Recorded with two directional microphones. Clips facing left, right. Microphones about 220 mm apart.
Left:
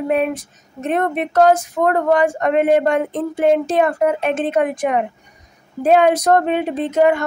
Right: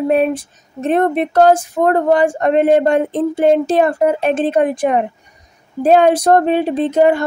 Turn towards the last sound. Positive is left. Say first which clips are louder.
# right 3 dB
turn(degrees=-30)  # may be behind; listen again after turning